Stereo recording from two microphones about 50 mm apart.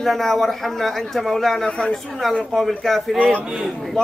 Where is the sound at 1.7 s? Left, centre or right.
Left.